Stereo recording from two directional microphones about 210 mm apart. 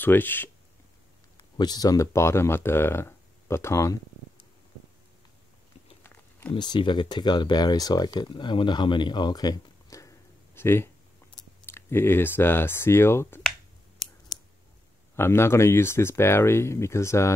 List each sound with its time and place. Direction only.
0.0 s speech: 10° left (ahead or behind)
1.6 s speech: 20° left (ahead or behind)
6.5 s speech: 20° left (ahead or behind)
15.1 s speech: 10° left (ahead or behind)